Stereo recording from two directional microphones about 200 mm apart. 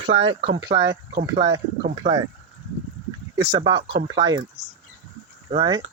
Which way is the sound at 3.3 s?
25° right (ahead or behind).